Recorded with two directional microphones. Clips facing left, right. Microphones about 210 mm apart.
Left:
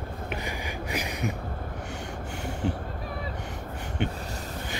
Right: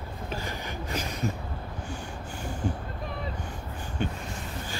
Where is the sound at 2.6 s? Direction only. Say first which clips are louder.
Left 2 dB; 75° left (ahead or behind).